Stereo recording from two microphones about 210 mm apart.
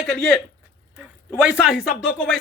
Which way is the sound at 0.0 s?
Centre (ahead or behind).